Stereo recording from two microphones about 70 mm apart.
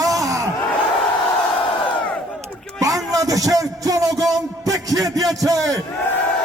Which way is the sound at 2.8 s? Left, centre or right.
Right.